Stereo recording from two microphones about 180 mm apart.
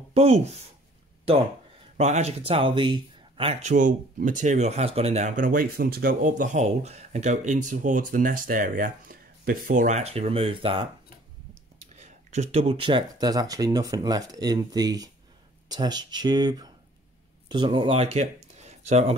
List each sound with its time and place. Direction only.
0.1 s speech: 35° right (ahead or behind)
2.0 s speech: 40° right (ahead or behind)
3.7 s speech: 45° right (ahead or behind); by 10.9 s 30° right (ahead or behind)
12.0 s speech: 40° right (ahead or behind)